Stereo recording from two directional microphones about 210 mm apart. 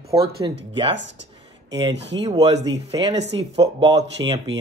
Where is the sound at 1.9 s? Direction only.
55° right (ahead or behind).